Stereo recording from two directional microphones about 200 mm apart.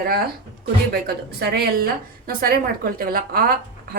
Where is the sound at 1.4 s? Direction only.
50° right (ahead or behind).